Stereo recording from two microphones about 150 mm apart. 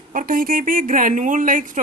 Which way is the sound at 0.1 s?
65° right (ahead or behind).